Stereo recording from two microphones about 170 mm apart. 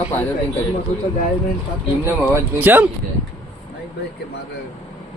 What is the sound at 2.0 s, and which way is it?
Speech, 15° right (ahead or behind).